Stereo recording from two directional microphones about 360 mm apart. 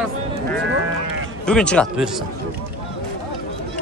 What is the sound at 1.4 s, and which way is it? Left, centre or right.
Speech, centre.